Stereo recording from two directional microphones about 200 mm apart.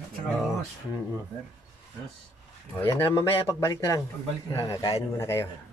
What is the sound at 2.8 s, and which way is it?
Speech, 15° left (ahead or behind).